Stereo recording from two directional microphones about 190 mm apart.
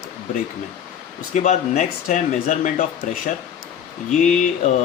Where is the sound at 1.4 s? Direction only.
35° left (ahead or behind).